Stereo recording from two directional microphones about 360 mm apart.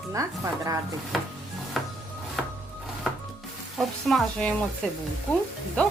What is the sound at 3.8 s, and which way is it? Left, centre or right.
Speech, centre.